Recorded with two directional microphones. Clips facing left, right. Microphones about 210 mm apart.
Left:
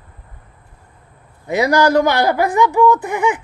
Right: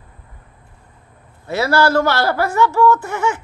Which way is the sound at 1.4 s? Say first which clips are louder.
Left 2 dB; 15° left (ahead or behind).